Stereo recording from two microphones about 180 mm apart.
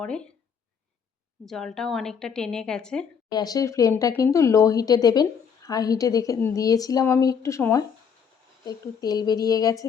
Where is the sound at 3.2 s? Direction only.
20° left (ahead or behind).